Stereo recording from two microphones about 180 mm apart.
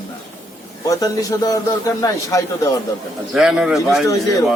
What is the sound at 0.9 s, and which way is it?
Speech, 20° left (ahead or behind).